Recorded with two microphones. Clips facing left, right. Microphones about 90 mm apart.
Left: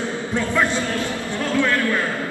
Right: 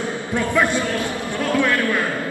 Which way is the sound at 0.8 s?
15° right (ahead or behind).